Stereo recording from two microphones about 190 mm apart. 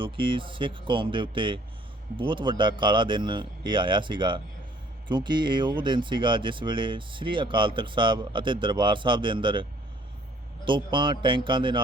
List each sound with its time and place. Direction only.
0.0 s speech: 25° right (ahead or behind)
10.7 s speech: 25° right (ahead or behind)